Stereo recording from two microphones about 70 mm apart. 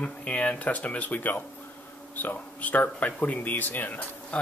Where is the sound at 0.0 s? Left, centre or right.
Centre.